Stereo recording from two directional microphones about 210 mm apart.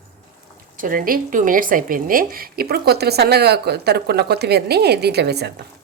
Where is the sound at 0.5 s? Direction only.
40° right (ahead or behind).